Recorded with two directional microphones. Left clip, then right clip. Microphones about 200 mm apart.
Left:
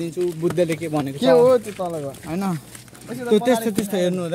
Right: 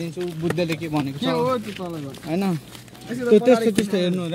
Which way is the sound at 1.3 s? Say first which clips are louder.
Left 9 dB; 55° left (ahead or behind).